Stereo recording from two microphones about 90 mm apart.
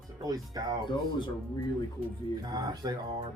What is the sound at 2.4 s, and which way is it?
Speech, 50° right (ahead or behind).